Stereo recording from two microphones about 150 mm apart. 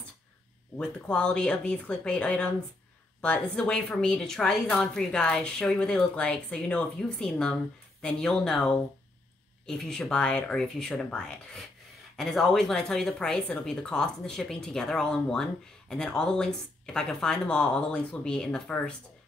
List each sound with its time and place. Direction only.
0.7 s speech: 5° left (ahead or behind)
3.5 s a woman's voice: 5° left (ahead or behind)